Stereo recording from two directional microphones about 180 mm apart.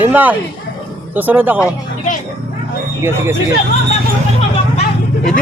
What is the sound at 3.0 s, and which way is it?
Speech, 15° right (ahead or behind).